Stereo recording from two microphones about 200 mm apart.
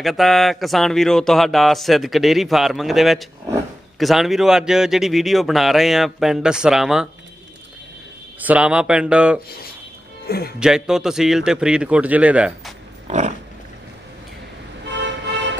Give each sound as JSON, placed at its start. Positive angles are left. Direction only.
{"t": 0.0, "sound": "speech", "side_deg": 0}
{"t": 8.4, "sound": "speech", "side_deg": -5}
{"t": 10.2, "sound": "speech", "side_deg": 50}
{"t": 10.6, "sound": "speech", "side_deg": -5}